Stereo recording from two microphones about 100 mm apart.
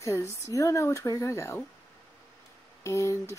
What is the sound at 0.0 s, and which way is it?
A woman's voice, 30° left (ahead or behind).